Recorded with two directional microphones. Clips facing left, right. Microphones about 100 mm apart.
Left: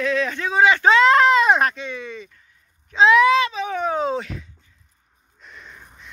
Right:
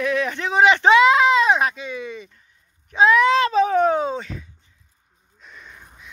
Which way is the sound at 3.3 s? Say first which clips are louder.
Right 3 dB; 40° right (ahead or behind).